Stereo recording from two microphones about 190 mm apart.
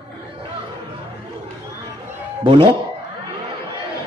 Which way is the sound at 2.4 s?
25° right (ahead or behind).